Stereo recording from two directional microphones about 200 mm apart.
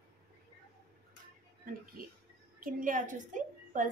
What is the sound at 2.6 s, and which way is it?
A woman's voice, 40° right (ahead or behind).